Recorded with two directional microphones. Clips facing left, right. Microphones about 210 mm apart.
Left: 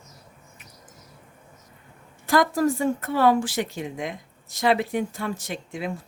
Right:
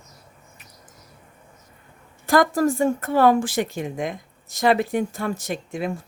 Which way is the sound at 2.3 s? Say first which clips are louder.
Right 2 dB; 45° right (ahead or behind).